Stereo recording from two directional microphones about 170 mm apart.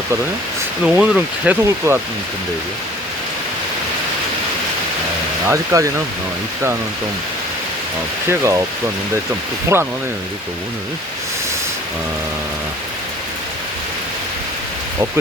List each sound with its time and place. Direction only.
0.9 s speech: 5° right (ahead or behind)
5.5 s speech: 20° right (ahead or behind)
8.3 s speech: 20° right (ahead or behind)
9.7 s speech: 15° right (ahead or behind)